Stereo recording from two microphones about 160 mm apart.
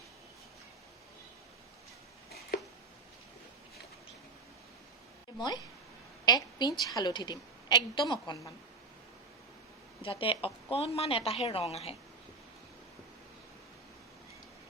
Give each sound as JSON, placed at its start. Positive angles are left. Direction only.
{"t": 5.4, "sound": "a woman's voice", "side_deg": 25}
{"t": 10.0, "sound": "a woman's voice", "side_deg": 35}